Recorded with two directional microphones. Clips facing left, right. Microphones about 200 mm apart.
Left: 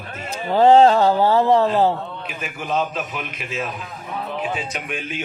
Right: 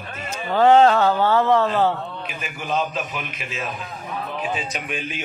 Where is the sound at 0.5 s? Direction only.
35° left (ahead or behind).